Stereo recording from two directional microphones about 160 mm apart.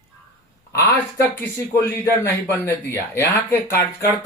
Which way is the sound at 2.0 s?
15° left (ahead or behind).